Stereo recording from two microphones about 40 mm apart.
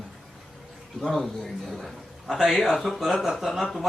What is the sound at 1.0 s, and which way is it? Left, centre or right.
Speech, centre.